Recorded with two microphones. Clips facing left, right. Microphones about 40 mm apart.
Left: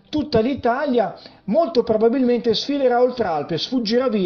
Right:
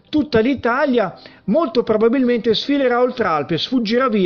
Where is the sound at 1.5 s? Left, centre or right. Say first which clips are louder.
Right 1 dB; right.